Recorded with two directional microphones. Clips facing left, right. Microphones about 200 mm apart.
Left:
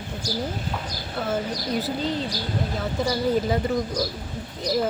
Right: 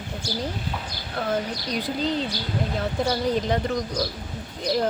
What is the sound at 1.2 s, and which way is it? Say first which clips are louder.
Speech: even; 5° left (ahead or behind).